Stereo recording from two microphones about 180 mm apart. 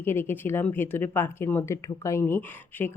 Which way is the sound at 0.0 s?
10° left (ahead or behind).